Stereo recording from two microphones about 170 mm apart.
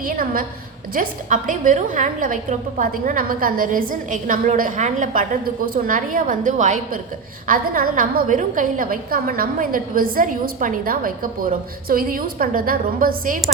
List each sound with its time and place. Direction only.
0.0 s a woman's voice: 55° right (ahead or behind)